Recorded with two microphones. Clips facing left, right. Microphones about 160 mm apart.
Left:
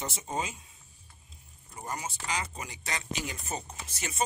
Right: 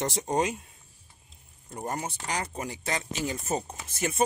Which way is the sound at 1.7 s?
50° right (ahead or behind).